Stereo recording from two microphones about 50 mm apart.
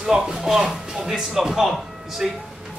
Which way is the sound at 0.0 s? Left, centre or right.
Centre.